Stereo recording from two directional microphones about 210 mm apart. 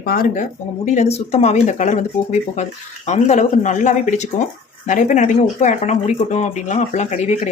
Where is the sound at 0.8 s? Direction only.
30° left (ahead or behind).